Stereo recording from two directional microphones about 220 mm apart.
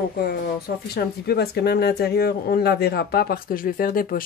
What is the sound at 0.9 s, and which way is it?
Speech, 45° left (ahead or behind).